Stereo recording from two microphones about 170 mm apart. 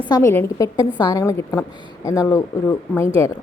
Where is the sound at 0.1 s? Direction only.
15° left (ahead or behind).